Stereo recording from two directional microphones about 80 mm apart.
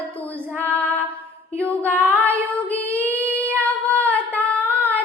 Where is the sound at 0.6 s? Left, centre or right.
Centre.